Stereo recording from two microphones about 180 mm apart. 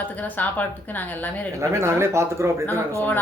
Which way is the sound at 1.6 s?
15° right (ahead or behind).